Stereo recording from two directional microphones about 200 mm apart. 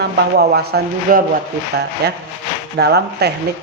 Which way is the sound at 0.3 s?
55° right (ahead or behind).